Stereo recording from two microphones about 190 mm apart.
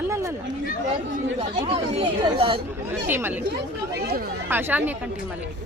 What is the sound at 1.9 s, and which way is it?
Speech, 30° right (ahead or behind).